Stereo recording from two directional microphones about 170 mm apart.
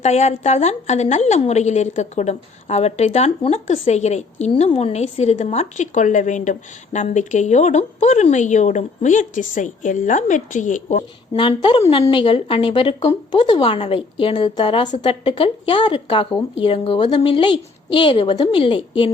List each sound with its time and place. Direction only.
0.0 s a woman's voice: 40° left (ahead or behind)
11.3 s a woman's voice: 30° left (ahead or behind)